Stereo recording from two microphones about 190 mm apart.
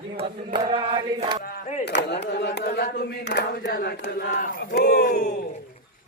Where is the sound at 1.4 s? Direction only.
50° left (ahead or behind).